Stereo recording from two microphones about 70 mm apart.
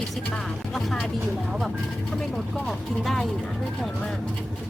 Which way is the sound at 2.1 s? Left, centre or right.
Centre.